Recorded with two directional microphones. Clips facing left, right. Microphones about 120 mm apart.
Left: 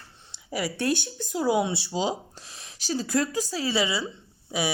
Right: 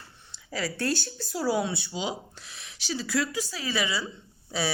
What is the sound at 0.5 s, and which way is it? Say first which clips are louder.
Speech: left 3 dB; 15° left (ahead or behind).